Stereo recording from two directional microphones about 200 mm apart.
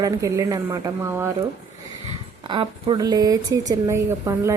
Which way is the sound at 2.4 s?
25° right (ahead or behind).